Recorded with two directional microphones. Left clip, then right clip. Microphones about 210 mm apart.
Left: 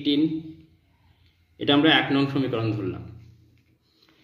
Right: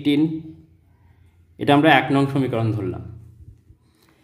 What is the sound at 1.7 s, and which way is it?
Speech, 50° right (ahead or behind).